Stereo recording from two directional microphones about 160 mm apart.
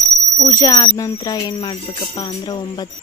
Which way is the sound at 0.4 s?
20° left (ahead or behind).